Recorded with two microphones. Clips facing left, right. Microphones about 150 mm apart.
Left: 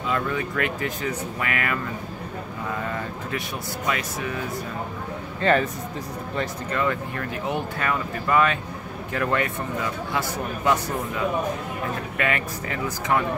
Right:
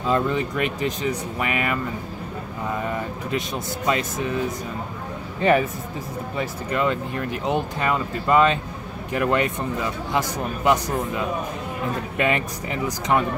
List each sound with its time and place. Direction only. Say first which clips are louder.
0.0 s speech: right 4 dB; 25° right (ahead or behind)
2.8 s speech: right 2 dB; 15° right (ahead or behind)
5.4 s speech: right 2 dB; 15° right (ahead or behind)
6.8 s speech: right 2 dB; 20° right (ahead or behind)
12.2 s speech: right 3 dB; 20° right (ahead or behind)